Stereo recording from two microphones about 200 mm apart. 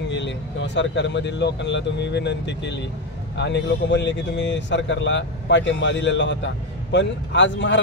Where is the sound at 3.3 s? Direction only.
60° left (ahead or behind).